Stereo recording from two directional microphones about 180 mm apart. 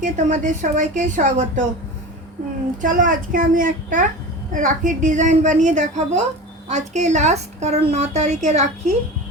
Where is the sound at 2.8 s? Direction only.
45° right (ahead or behind).